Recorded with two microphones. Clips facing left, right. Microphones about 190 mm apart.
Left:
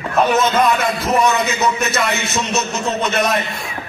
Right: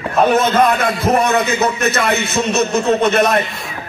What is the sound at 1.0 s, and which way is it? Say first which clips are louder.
A man's voice: right 2 dB; 55° right (ahead or behind).